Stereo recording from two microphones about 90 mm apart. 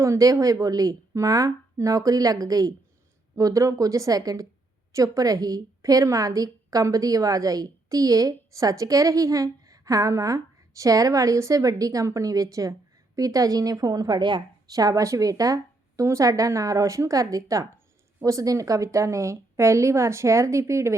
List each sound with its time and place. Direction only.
0.0 s a woman's voice: 35° right (ahead or behind)